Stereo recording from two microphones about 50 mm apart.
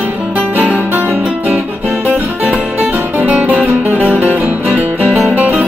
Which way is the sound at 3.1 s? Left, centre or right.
Right.